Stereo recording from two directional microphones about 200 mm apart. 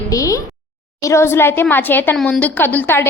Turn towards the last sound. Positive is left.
turn(degrees=10)  # may be behind; listen again after turning